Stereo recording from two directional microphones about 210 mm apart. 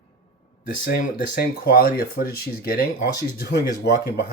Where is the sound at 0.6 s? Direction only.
40° left (ahead or behind).